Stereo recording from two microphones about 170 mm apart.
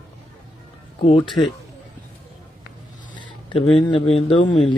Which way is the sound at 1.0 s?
35° left (ahead or behind).